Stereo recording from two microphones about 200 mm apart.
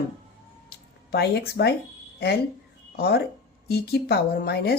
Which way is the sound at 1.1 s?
55° left (ahead or behind).